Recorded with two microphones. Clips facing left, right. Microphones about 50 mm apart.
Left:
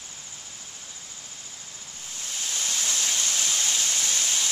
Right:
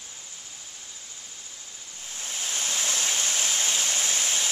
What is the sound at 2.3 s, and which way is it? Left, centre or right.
Waterfall, right.